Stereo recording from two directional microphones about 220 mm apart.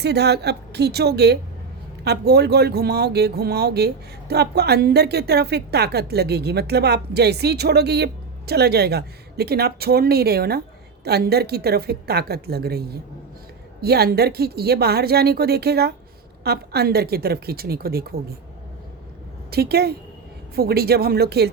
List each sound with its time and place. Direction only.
0.0 s speech: 50° right (ahead or behind)
19.5 s speech: 45° right (ahead or behind)